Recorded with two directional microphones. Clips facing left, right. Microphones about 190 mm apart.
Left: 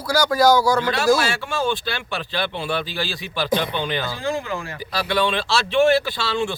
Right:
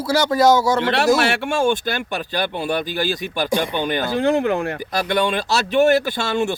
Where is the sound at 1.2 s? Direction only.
60° right (ahead or behind).